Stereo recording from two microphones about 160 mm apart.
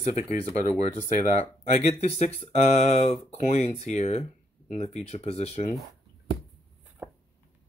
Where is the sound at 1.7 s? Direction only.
50° left (ahead or behind).